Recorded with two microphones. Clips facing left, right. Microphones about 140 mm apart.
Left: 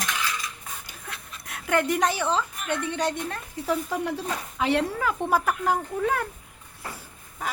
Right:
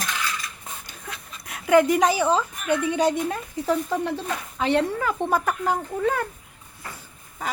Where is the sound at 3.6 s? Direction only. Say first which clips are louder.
Right 3 dB; 5° left (ahead or behind).